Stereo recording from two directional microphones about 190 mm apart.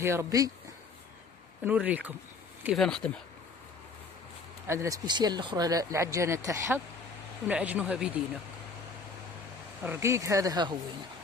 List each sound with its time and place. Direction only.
0.0 s speech: 15° right (ahead or behind)
1.6 s speech: 5° right (ahead or behind)
4.7 s speech: 15° right (ahead or behind)
9.8 s speech: 15° right (ahead or behind)